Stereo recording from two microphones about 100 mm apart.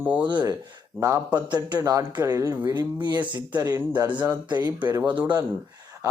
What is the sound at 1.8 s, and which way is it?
A man's voice, 30° right (ahead or behind).